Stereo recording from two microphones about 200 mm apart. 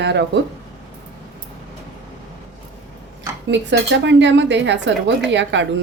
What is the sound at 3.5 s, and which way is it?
A woman's voice, 60° right (ahead or behind).